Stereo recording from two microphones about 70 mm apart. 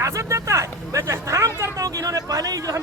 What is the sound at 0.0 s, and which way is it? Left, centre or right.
Speech, right.